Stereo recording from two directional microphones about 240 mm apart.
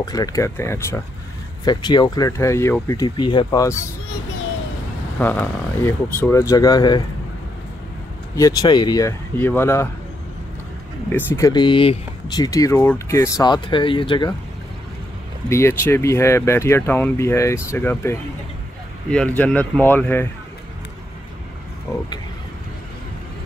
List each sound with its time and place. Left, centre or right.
0.0 s speech: centre
5.2 s speech: centre
8.4 s speech: centre
11.1 s speech: centre
15.5 s speech: centre
21.9 s speech: centre